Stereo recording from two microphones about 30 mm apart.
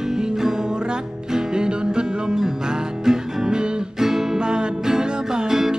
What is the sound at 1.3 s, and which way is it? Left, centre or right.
Music, right.